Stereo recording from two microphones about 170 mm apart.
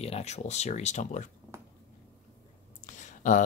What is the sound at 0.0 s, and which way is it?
Speech, 40° left (ahead or behind).